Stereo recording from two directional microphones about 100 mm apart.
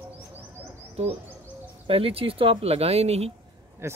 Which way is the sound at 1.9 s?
70° right (ahead or behind).